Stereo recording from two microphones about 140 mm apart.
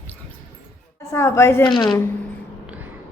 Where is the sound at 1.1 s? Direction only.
20° left (ahead or behind).